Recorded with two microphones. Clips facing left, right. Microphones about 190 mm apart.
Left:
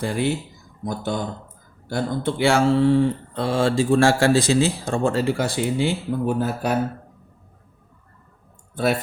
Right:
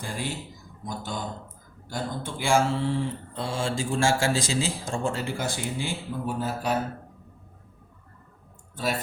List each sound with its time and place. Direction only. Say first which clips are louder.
0.0 s speech: left 10 dB; 65° left (ahead or behind)